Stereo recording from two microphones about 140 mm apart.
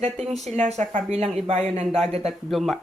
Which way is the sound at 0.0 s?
55° right (ahead or behind).